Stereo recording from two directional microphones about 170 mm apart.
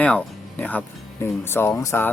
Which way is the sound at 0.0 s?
10° left (ahead or behind).